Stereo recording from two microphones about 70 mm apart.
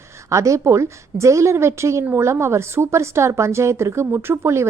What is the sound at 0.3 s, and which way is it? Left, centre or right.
A woman's voice, right.